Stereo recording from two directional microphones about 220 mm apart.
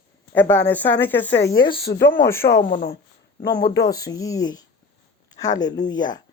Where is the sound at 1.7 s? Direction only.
45° left (ahead or behind).